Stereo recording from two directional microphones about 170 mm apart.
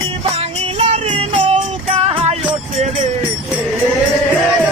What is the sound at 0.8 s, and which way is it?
Music, 40° right (ahead or behind).